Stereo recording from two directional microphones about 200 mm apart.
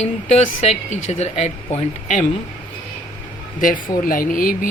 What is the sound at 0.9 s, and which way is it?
Speech, 35° left (ahead or behind).